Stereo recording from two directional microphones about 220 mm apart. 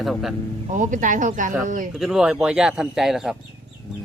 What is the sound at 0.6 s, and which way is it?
Speech, 35° right (ahead or behind).